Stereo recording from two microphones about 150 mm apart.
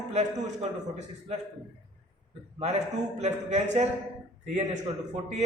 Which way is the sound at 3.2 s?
50° right (ahead or behind).